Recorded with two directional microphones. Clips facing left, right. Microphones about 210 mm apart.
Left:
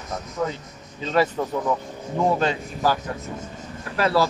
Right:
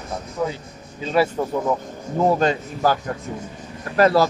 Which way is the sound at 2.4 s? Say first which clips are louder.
Right 3 dB; 45° right (ahead or behind).